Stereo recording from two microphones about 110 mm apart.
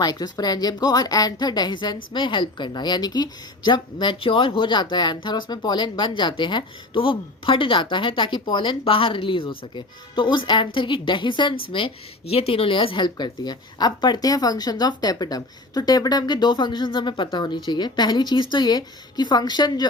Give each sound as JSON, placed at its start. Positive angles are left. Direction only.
{"t": 0.0, "sound": "a woman's voice", "side_deg": 35}
{"t": 12.3, "sound": "a woman's voice", "side_deg": 60}